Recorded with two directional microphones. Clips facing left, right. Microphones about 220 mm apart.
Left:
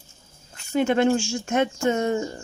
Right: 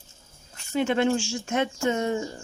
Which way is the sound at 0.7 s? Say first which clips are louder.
Left 3 dB; 50° left (ahead or behind).